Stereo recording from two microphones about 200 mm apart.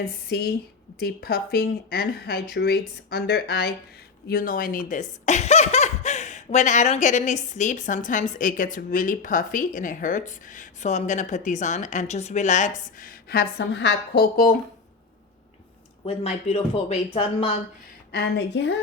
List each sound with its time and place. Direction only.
0.0 s speech: 50° left (ahead or behind)
16.0 s speech: 30° left (ahead or behind)
18.1 s a woman's voice: 55° left (ahead or behind)